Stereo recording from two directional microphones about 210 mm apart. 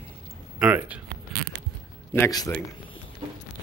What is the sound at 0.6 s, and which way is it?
Speech, 5° right (ahead or behind).